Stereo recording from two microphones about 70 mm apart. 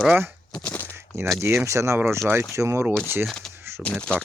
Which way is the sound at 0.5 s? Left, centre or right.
Left.